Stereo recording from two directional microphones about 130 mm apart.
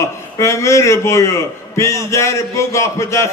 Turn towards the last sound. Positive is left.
turn(degrees=20)  # may be behind; listen again after turning